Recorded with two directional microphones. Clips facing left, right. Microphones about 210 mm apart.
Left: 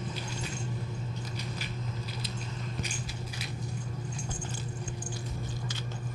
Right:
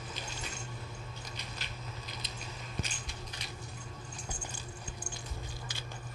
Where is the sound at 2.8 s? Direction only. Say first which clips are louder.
Left 6 dB; 5° left (ahead or behind).